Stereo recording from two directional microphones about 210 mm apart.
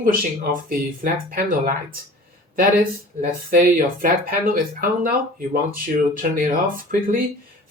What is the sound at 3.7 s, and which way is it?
Speech, 40° right (ahead or behind).